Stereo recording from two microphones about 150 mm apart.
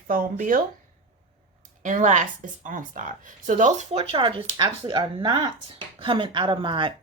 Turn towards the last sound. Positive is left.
turn(degrees=-35)  # may be behind; listen again after turning